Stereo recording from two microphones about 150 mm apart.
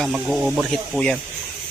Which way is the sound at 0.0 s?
5° right (ahead or behind).